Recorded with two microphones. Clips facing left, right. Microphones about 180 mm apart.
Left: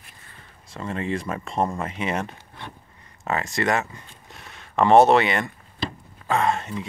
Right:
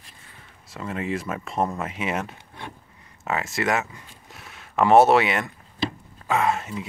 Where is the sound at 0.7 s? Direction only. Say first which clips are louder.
Left 1 dB; 5° right (ahead or behind).